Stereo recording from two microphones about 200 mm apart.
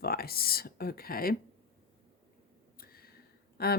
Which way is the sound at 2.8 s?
50° left (ahead or behind).